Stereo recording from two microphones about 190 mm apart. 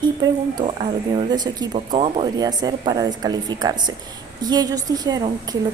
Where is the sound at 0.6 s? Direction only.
30° right (ahead or behind).